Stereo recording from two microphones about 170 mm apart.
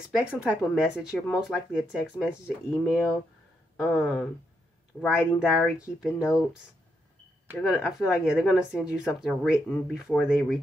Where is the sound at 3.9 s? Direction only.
15° left (ahead or behind).